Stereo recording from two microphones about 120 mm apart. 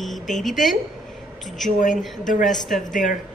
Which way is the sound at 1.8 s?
90° left.